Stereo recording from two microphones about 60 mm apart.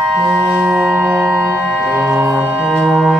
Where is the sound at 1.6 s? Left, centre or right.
Centre.